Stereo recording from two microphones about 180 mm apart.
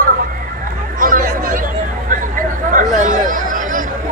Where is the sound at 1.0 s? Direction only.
50° right (ahead or behind).